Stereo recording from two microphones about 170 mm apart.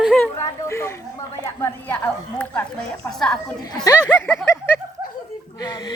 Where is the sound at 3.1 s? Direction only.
Centre (ahead or behind).